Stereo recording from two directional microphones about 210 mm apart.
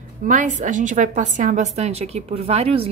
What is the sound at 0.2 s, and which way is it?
A woman's voice, 35° right (ahead or behind).